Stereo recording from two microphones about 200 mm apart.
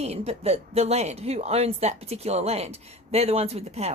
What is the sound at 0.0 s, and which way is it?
A woman's voice, 30° right (ahead or behind).